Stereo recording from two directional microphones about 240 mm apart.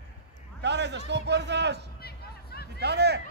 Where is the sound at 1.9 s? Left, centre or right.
Left.